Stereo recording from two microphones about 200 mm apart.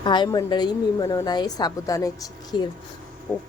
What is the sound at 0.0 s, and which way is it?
A woman's voice, 20° left (ahead or behind).